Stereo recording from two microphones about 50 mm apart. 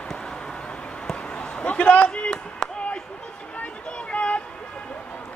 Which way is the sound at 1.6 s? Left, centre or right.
Left.